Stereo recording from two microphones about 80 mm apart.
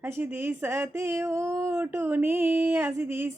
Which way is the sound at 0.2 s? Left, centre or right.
Right.